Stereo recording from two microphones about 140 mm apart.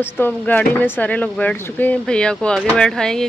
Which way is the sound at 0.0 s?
15° left (ahead or behind).